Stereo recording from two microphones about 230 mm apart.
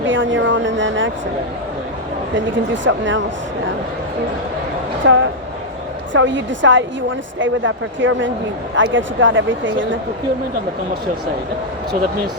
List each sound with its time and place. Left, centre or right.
0.0 s speech: right
2.8 s speech: right
5.0 s speech: right